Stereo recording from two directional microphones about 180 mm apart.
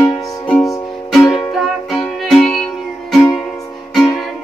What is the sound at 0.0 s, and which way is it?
Music, 20° left (ahead or behind).